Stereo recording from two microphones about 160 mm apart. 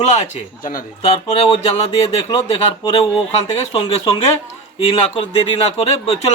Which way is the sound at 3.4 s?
30° left (ahead or behind).